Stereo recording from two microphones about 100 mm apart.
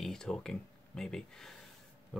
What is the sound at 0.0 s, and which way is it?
Speech, 5° left (ahead or behind).